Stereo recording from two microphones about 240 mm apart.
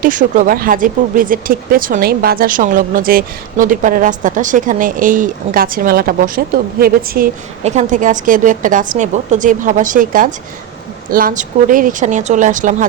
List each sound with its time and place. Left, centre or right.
0.0 s speech: right